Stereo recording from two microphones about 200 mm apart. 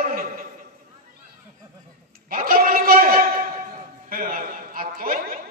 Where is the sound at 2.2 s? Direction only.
45° right (ahead or behind).